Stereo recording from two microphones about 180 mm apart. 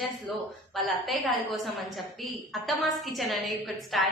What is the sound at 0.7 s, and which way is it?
A woman's voice, centre (ahead or behind).